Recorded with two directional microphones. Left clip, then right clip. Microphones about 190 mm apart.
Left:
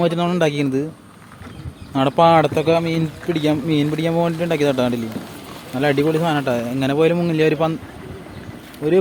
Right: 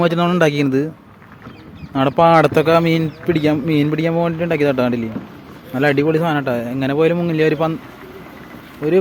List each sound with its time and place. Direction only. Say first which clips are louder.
0.0 s a man's voice: right 3 dB; 10° right (ahead or behind)
1.9 s speech: right 1 dB; centre (ahead or behind)
2.4 s speech: right 4 dB; 20° right (ahead or behind)
3.3 s speech: right 2 dB; 10° right (ahead or behind)
8.8 s speech: right 1 dB; 35° right (ahead or behind)